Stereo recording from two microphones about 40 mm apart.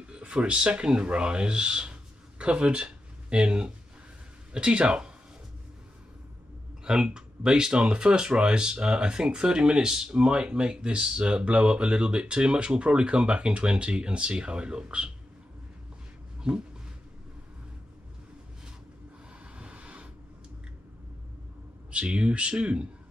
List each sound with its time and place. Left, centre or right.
0.0 s speech: right
6.8 s a sound: centre
7.2 s speech: centre
10.1 s speech: right
16.5 s speech: right
19.4 s vehicle: right
21.9 s speech: right